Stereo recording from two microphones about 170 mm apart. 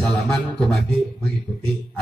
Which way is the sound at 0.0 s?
Centre (ahead or behind).